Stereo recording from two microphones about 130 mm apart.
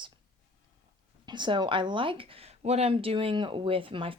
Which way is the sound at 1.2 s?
35° right (ahead or behind).